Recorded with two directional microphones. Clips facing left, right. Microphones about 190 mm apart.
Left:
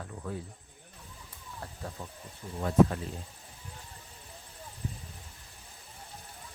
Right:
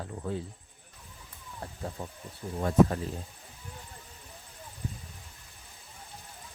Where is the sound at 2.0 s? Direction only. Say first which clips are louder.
Right 4 dB; 40° right (ahead or behind).